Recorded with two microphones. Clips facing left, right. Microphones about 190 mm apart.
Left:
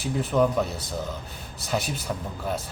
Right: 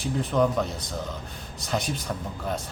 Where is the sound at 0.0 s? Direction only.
5° left (ahead or behind).